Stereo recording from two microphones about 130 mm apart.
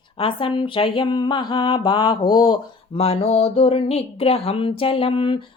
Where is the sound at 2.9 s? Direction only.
50° left (ahead or behind).